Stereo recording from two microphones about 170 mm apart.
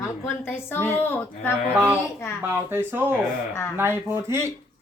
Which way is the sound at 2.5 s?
15° right (ahead or behind).